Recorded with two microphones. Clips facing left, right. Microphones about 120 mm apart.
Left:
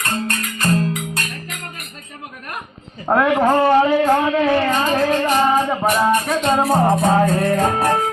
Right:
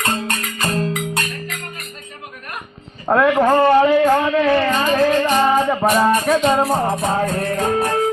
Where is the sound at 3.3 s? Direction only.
10° left (ahead or behind).